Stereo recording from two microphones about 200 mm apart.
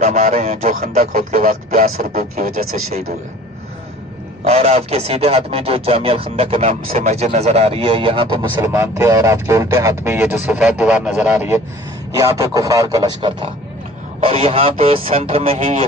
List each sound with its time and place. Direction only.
0.0 s a man's voice: 35° right (ahead or behind)
4.4 s a man's voice: 30° right (ahead or behind)
8.6 s speech: 15° right (ahead or behind); by 15.8 s 35° right (ahead or behind)